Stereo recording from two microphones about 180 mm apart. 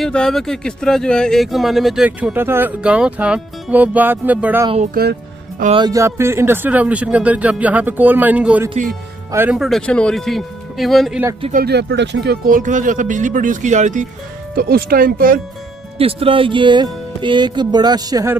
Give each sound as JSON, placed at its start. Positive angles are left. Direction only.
{"t": 0.0, "sound": "speech", "side_deg": 5}
{"t": 5.0, "sound": "speech", "side_deg": -55}
{"t": 5.8, "sound": "speech", "side_deg": -20}
{"t": 11.5, "sound": "speech", "side_deg": -65}
{"t": 12.4, "sound": "speech", "side_deg": -45}
{"t": 14.5, "sound": "speech", "side_deg": -55}
{"t": 16.0, "sound": "speech", "side_deg": -30}